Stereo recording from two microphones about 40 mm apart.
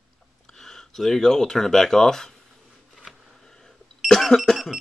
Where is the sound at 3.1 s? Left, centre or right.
Centre.